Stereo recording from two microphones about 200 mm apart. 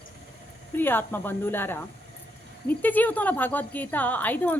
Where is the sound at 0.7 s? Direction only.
10° left (ahead or behind).